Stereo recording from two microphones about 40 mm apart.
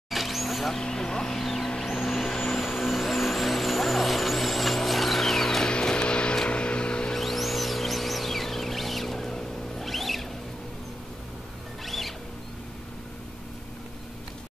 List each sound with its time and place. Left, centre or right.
0.1 s vehicle: centre
0.7 s speech: centre
1.7 s vehicle: centre
2.6 s vehicle: centre
5.7 s music: left
6.5 s vehicle: left
7.2 s music: centre
11.8 s music: centre